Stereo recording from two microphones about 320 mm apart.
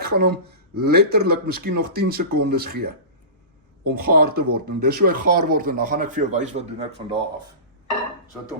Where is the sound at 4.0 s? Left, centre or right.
Right.